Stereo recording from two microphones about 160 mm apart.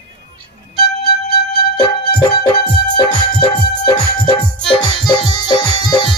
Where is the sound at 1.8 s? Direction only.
25° left (ahead or behind).